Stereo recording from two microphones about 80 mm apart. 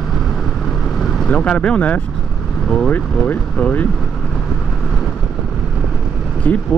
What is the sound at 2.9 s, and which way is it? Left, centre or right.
Speech, left.